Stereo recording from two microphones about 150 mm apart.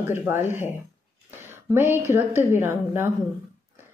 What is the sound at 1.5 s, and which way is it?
A woman's voice, 15° right (ahead or behind).